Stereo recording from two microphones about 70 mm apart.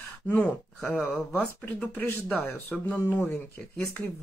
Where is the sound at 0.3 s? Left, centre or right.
Left.